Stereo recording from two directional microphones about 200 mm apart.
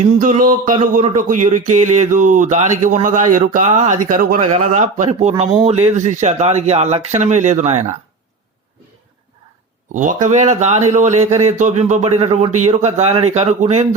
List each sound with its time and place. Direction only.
0.0 s speech: 40° right (ahead or behind)
9.9 s speech: 40° right (ahead or behind)